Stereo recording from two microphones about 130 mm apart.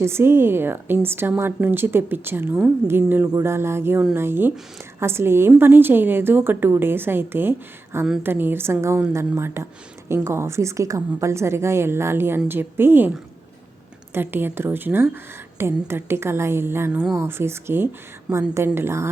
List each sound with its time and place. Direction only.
0.0 s a woman's voice: 20° right (ahead or behind)
14.1 s a woman's voice: 15° right (ahead or behind)